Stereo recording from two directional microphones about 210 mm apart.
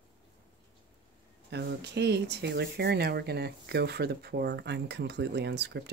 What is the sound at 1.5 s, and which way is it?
Speech, 55° right (ahead or behind).